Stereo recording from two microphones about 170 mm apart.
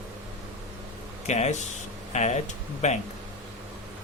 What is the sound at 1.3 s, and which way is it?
Speech, 40° left (ahead or behind).